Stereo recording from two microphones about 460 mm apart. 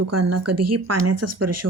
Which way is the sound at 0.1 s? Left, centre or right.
Right.